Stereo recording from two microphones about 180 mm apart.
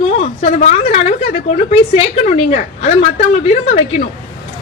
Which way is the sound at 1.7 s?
35° left (ahead or behind).